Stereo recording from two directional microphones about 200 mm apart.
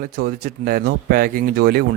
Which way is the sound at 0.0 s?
50° right (ahead or behind).